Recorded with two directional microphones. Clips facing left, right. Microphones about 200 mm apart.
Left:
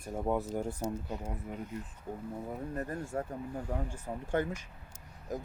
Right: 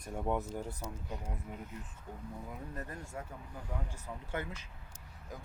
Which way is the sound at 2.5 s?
40° left (ahead or behind).